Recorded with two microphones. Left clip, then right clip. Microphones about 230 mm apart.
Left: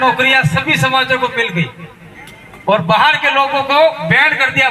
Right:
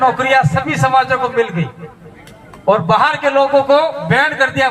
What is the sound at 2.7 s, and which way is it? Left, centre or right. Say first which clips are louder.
A man's voice: left 1 dB; left.